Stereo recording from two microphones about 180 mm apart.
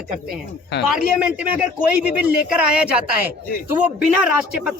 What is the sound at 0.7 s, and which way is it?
Speech, 65° left (ahead or behind).